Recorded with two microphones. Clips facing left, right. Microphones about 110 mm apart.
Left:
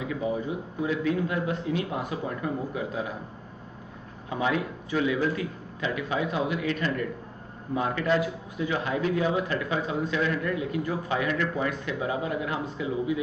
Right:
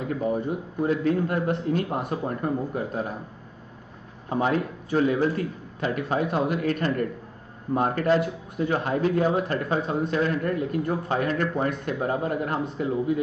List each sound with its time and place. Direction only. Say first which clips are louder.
0.0 s speech: right 3 dB; 50° right (ahead or behind)
4.3 s speech: right 3 dB; 45° right (ahead or behind)